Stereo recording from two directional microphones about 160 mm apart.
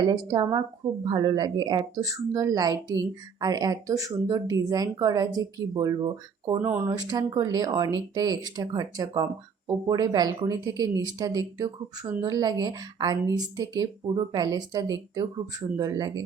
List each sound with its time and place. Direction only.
0.1 s speech: 30° right (ahead or behind)